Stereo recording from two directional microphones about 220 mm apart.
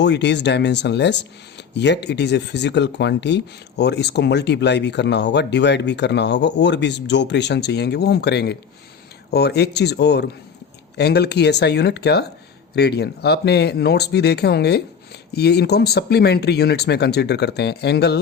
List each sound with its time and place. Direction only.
0.0 s speech: 50° left (ahead or behind)